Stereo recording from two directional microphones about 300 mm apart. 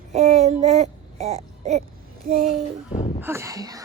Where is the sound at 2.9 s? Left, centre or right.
Left.